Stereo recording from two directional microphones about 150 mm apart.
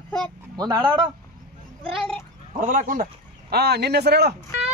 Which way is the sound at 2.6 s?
65° right (ahead or behind).